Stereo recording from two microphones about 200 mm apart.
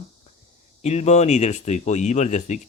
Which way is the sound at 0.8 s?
35° left (ahead or behind).